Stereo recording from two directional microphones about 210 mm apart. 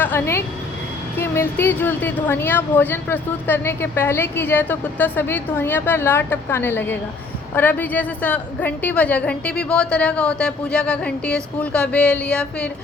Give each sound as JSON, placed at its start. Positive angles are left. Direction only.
{"t": 0.0, "sound": "a woman's voice", "side_deg": 10}